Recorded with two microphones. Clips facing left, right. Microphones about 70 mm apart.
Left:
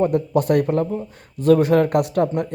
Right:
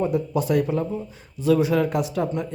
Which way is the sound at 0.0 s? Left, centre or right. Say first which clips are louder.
Left 4 dB; left.